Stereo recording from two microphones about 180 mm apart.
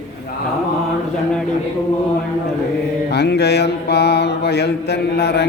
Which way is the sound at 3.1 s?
70° left (ahead or behind).